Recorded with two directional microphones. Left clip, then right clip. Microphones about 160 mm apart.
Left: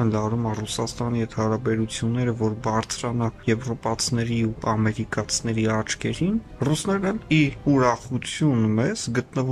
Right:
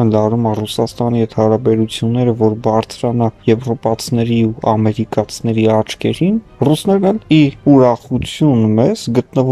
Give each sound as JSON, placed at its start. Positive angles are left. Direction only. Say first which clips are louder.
{"t": 0.0, "sound": "speech", "louder": "right 12 dB", "side_deg": -25}